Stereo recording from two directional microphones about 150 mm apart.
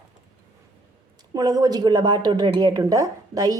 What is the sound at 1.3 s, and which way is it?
Speech, 25° right (ahead or behind).